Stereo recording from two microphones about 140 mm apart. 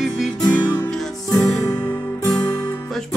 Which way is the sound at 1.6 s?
25° left (ahead or behind).